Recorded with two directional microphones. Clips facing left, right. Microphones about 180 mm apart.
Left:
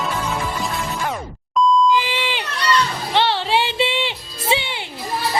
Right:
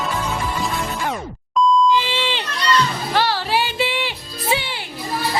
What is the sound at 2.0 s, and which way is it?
Beep, 15° left (ahead or behind).